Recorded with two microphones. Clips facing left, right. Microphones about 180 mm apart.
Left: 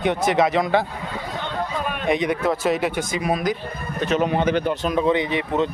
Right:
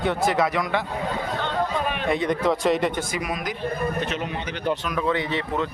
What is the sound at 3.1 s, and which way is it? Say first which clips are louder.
Speech: left 6 dB; 30° left (ahead or behind).